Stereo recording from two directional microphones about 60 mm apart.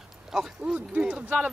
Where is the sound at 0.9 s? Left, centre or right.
Right.